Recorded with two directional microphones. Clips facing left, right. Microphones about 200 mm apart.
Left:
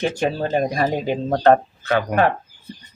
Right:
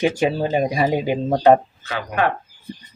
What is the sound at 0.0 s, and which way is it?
Speech, 10° right (ahead or behind).